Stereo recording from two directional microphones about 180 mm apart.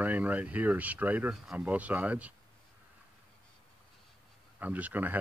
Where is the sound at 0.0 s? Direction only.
10° right (ahead or behind).